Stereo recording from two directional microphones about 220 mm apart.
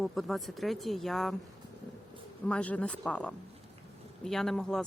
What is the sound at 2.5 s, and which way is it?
Speech, 5° left (ahead or behind).